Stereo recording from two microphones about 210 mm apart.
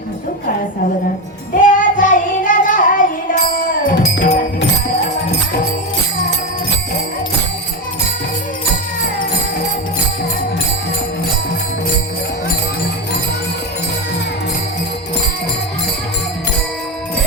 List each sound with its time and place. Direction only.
1.5 s child singing: 40° left (ahead or behind)
3.8 s music: 40° left (ahead or behind)